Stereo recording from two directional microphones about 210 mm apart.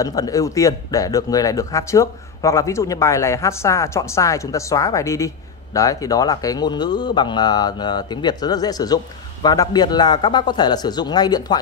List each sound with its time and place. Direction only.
0.0 s speech: 15° left (ahead or behind)